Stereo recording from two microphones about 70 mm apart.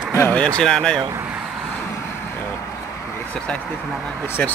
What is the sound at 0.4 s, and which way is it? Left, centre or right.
Speech, centre.